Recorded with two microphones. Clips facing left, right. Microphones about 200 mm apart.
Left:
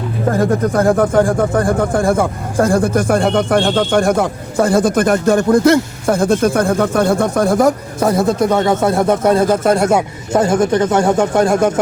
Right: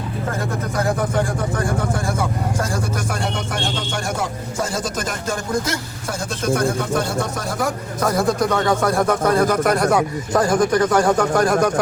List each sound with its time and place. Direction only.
0.7 s speech: 50° left (ahead or behind)
7.9 s a man's voice: 25° left (ahead or behind)